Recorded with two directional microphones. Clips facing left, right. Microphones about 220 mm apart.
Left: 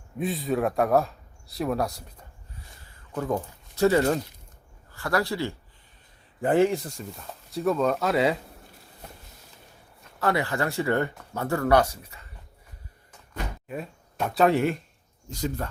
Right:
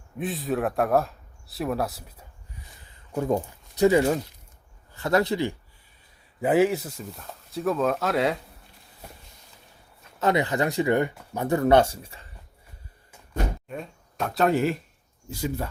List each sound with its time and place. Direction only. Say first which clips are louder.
0.2 s speech: left 1 dB; centre (ahead or behind)
3.2 s speech: right 3 dB; 25° right (ahead or behind)
4.9 s speech: right 4 dB; 20° right (ahead or behind)
6.4 s speech: right 1 dB; 5° right (ahead or behind)
10.2 s speech: right 3 dB; 20° right (ahead or behind)
13.7 s speech: left 1 dB; 5° left (ahead or behind)